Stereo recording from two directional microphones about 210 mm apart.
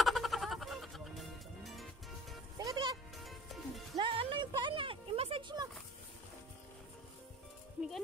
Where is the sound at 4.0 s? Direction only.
25° right (ahead or behind).